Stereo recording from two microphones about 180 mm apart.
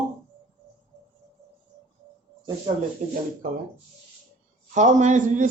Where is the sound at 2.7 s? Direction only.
30° right (ahead or behind).